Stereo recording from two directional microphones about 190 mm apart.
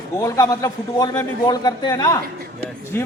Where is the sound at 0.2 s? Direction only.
15° left (ahead or behind).